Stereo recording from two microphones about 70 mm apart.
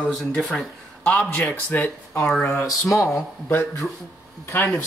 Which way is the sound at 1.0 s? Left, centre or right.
Centre.